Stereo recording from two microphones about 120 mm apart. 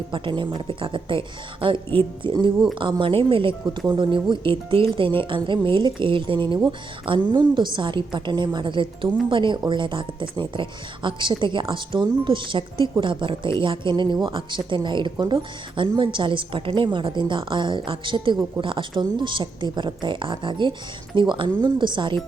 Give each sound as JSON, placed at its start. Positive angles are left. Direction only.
{"t": 0.1, "sound": "speech", "side_deg": -40}